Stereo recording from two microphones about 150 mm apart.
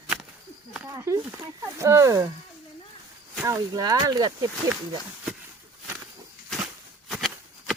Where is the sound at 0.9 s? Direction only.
20° right (ahead or behind).